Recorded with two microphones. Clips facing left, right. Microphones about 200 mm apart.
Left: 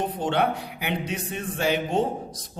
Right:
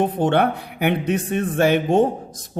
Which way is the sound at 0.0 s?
55° right (ahead or behind).